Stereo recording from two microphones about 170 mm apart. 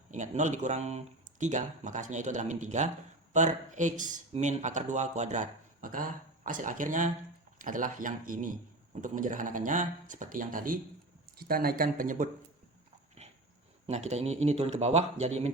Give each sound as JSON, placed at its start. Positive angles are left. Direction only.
{"t": 0.1, "sound": "speech", "side_deg": -45}
{"t": 13.2, "sound": "dog", "side_deg": -40}
{"t": 13.8, "sound": "speech", "side_deg": -40}